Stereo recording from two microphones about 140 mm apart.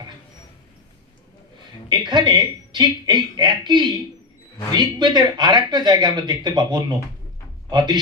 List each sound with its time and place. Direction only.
1.9 s speech: 30° right (ahead or behind)